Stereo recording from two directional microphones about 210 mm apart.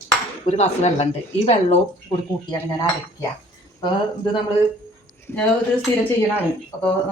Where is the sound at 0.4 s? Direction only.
30° left (ahead or behind).